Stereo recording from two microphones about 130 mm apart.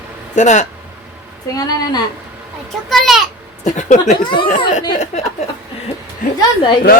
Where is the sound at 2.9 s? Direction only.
Centre (ahead or behind).